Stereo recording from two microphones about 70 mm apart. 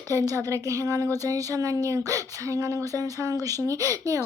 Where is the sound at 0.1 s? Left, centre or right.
Right.